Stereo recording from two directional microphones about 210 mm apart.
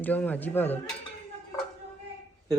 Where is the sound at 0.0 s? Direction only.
10° left (ahead or behind).